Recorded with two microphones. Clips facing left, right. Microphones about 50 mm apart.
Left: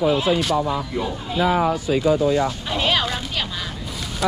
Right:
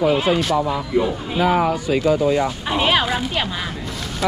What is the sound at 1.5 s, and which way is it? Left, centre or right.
Speech, right.